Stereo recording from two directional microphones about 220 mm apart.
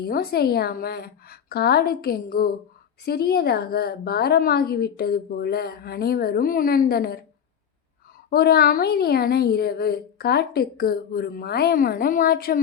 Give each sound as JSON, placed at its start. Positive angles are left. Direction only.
{"t": 0.0, "sound": "a woman's voice", "side_deg": 45}
{"t": 8.3, "sound": "a woman's voice", "side_deg": 45}